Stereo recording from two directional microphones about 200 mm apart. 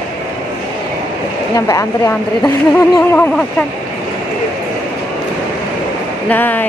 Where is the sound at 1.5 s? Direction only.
15° left (ahead or behind).